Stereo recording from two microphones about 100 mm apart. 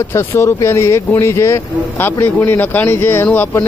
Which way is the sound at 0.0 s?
25° left (ahead or behind).